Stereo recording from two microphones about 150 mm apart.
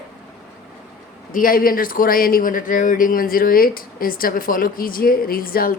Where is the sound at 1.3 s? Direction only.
70° left (ahead or behind).